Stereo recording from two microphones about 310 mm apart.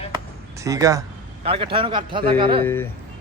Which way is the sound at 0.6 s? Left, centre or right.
Centre.